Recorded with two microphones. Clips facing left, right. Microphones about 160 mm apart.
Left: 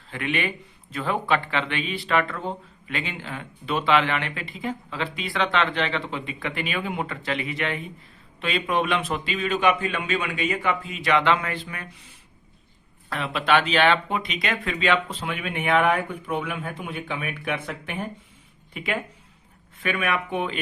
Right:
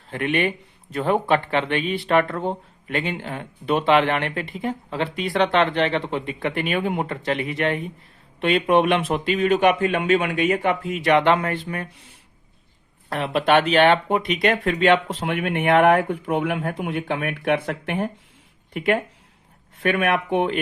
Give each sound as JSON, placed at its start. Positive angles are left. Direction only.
{"t": 0.1, "sound": "speech", "side_deg": -50}
{"t": 8.7, "sound": "a man's voice", "side_deg": -65}
{"t": 13.1, "sound": "a man's voice", "side_deg": -50}
{"t": 19.8, "sound": "a man's voice", "side_deg": -60}